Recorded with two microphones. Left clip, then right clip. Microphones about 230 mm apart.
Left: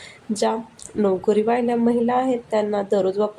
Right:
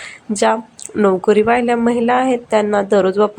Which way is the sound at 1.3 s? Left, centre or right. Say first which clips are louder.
Right 6 dB; centre.